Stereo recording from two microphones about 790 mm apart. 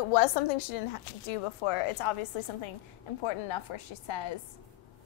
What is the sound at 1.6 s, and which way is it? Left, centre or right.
Speech, left.